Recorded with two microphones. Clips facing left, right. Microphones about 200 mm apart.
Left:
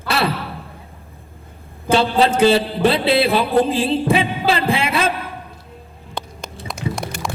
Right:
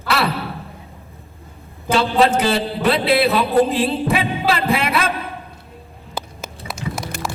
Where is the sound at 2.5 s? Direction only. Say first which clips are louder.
Left 2 dB; 30° left (ahead or behind).